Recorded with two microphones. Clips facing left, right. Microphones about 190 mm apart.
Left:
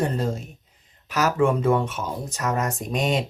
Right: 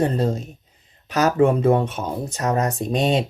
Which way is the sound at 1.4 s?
20° right (ahead or behind).